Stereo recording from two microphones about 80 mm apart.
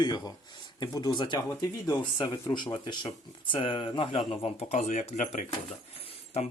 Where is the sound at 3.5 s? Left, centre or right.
Left.